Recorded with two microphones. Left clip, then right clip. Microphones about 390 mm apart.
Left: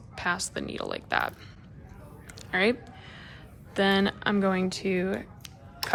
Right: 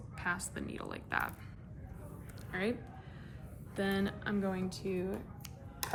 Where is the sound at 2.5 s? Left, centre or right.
Centre.